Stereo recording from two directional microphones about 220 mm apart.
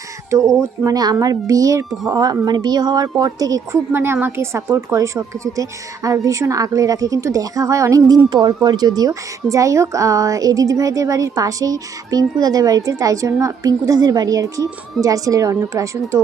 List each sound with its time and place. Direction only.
0.3 s a woman's voice: 15° right (ahead or behind)